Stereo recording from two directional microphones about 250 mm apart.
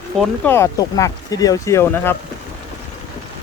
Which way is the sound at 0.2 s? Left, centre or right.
Centre.